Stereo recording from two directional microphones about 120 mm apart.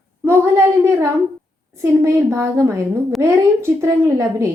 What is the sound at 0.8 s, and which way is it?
A woman's voice, 25° right (ahead or behind).